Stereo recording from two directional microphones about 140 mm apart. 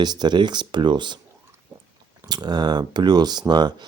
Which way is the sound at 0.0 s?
30° right (ahead or behind).